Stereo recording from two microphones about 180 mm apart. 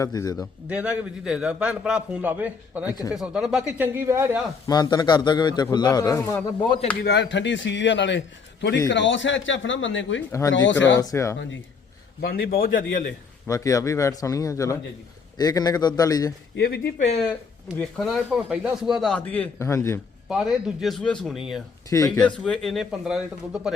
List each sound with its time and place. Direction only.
0.0 s a man's voice: 20° left (ahead or behind)
0.7 s a man's voice: 5° right (ahead or behind)
4.6 s a man's voice: 20° left (ahead or behind)
7.0 s speech: 70° left (ahead or behind); by 10.8 s 90° left
11.0 s speech: 15° left (ahead or behind)
12.2 s a man's voice: 55° left (ahead or behind)
13.5 s a man's voice: 20° left (ahead or behind)
16.6 s speech: 55° left (ahead or behind)
17.7 s a man's voice: 5° left (ahead or behind)
20.2 s a man's voice: centre (ahead or behind)
21.8 s a man's voice: 20° left (ahead or behind)
22.2 s a man's voice: 5° left (ahead or behind)